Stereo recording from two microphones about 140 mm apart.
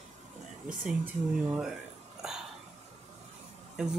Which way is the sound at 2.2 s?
5° right (ahead or behind).